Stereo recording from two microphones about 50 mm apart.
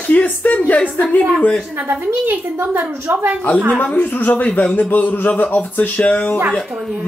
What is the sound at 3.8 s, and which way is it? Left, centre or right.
Music, left.